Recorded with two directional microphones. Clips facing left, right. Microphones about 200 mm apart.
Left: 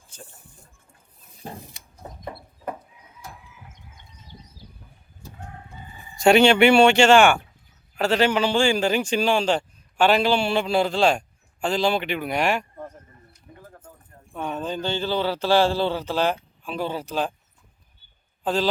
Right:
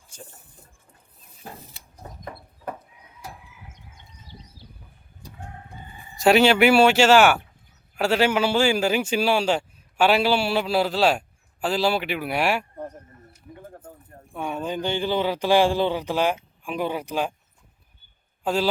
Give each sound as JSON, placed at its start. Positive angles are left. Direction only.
{"t": 0.1, "sound": "shatter", "side_deg": -10}
{"t": 2.2, "sound": "a sound", "side_deg": 5}
{"t": 6.1, "sound": "a man's voice", "side_deg": 0}
{"t": 13.6, "sound": "bird", "side_deg": -30}
{"t": 14.3, "sound": "a man's voice", "side_deg": -10}
{"t": 18.4, "sound": "a man's voice", "side_deg": -10}